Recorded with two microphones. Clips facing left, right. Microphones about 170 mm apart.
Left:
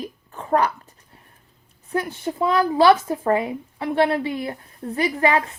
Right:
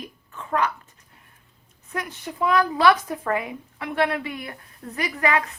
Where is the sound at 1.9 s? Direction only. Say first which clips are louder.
Left 7 dB; 30° left (ahead or behind).